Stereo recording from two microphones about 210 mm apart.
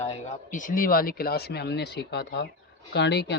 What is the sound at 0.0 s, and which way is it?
Speech, 30° left (ahead or behind).